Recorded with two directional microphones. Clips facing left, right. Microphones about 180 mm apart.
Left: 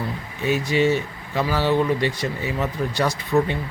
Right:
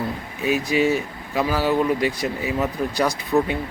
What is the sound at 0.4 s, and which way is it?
Speech, 15° right (ahead or behind).